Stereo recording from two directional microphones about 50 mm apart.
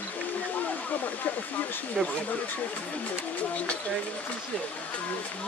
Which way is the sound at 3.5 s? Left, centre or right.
Left.